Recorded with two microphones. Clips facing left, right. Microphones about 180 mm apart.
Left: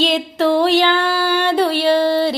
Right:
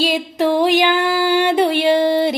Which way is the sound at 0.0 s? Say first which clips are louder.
Left 1 dB; 10° right (ahead or behind).